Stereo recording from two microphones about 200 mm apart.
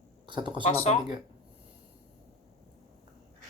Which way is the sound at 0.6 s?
30° left (ahead or behind).